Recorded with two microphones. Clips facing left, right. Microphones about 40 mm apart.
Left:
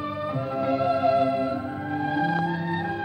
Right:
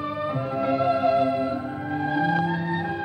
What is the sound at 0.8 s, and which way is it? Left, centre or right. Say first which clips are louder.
Organ: right 2 dB; centre.